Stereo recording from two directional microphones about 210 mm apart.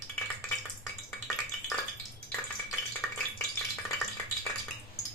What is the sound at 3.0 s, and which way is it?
Stir, 5° left (ahead or behind).